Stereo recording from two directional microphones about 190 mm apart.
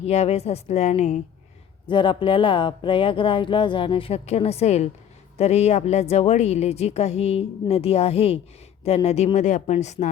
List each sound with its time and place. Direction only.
0.0 s a woman's voice: 35° left (ahead or behind)
1.9 s a woman's voice: 25° left (ahead or behind)